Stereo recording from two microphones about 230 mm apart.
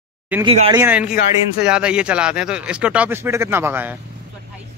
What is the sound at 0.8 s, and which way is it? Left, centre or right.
Speech, centre.